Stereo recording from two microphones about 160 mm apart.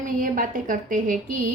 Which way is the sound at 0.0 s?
55° right (ahead or behind).